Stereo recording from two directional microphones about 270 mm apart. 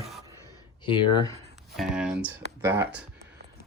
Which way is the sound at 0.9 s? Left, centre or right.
Centre.